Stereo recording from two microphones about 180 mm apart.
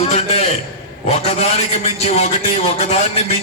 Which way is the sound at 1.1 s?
40° left (ahead or behind).